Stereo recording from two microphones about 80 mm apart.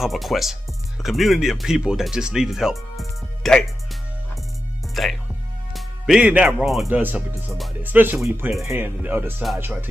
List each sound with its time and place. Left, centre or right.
0.0 s speech: centre
5.7 s music: centre
6.1 s speech: centre
6.6 s speech: centre
6.9 s speech: right